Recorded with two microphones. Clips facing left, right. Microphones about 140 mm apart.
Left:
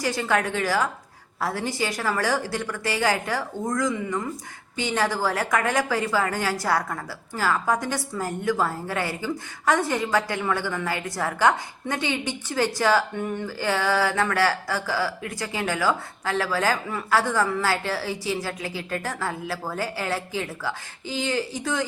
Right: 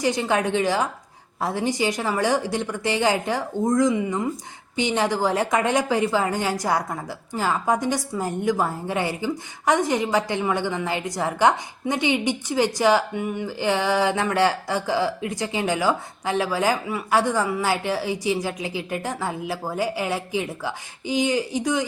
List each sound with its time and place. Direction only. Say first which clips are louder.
0.0 s a woman's voice: right 2 dB; 20° right (ahead or behind)